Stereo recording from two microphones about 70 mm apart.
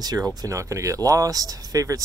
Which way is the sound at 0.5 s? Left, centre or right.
Right.